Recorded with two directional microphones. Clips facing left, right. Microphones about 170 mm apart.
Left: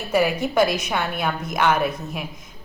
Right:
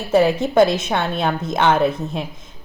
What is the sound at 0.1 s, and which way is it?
A woman's voice, 25° right (ahead or behind).